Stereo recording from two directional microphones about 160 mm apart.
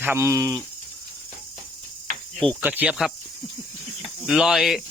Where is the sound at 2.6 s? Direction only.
10° right (ahead or behind).